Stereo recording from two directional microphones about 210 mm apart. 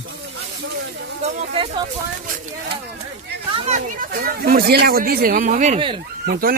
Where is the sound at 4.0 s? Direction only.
45° right (ahead or behind); by 5.9 s 30° right (ahead or behind).